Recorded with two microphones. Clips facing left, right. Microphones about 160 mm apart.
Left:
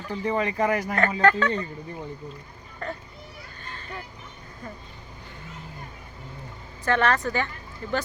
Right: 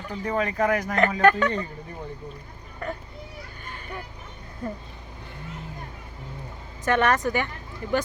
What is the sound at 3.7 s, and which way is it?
Vehicle, 15° right (ahead or behind).